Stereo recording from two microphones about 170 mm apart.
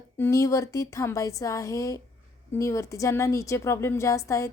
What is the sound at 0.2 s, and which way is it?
A woman's voice, 20° left (ahead or behind).